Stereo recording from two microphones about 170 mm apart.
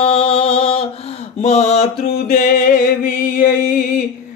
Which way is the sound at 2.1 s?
60° left (ahead or behind).